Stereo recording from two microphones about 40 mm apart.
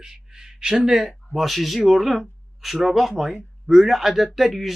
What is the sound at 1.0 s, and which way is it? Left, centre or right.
Speech, centre.